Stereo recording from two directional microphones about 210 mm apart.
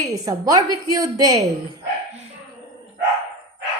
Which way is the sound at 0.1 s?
15° right (ahead or behind).